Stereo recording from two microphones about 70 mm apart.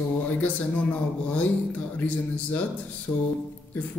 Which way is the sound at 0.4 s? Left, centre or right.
Left.